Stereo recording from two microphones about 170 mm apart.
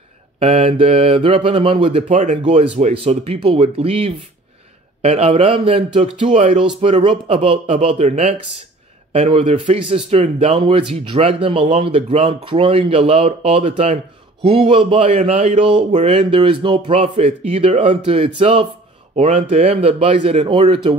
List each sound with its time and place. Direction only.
0.4 s speech: 35° right (ahead or behind)